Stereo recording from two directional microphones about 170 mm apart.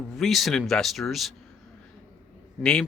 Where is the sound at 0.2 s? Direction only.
Centre (ahead or behind).